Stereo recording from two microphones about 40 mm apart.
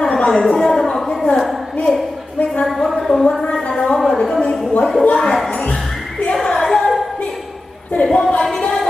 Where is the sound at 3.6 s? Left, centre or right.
Centre.